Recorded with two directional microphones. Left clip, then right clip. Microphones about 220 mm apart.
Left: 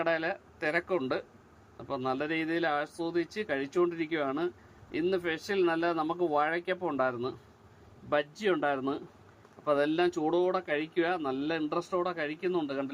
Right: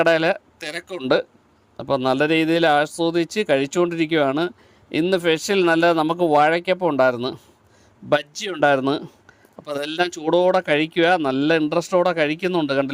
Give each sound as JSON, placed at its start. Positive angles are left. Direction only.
{"t": 0.0, "sound": "a man's voice", "side_deg": -55}